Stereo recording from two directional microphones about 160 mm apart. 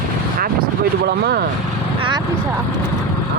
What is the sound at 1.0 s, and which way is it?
Speech, 85° right.